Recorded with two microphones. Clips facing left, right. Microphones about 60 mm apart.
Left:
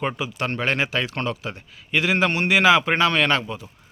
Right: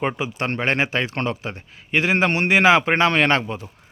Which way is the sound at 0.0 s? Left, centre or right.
Right.